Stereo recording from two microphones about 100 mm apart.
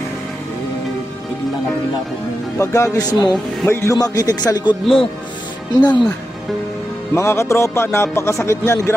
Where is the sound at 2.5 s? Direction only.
30° left (ahead or behind).